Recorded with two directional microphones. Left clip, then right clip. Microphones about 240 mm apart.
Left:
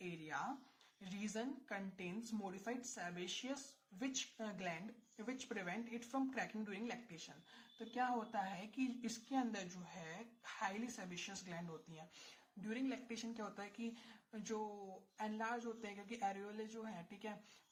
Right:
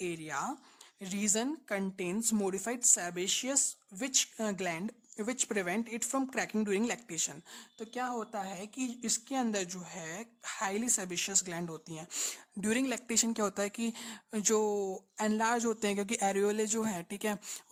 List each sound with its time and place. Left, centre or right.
0.0 s speech: right